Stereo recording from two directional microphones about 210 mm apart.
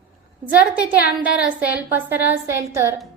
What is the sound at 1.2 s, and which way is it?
A woman's voice, 5° right (ahead or behind).